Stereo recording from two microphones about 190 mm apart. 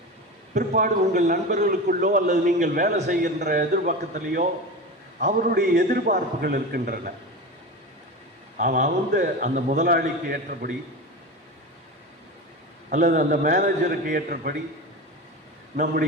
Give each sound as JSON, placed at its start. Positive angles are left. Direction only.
{"t": 0.5, "sound": "a man's voice", "side_deg": -45}
{"t": 8.5, "sound": "a man's voice", "side_deg": -45}
{"t": 12.9, "sound": "a man's voice", "side_deg": -45}
{"t": 15.7, "sound": "a man's voice", "side_deg": -45}